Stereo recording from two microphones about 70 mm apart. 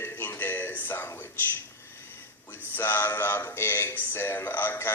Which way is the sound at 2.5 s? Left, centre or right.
Left.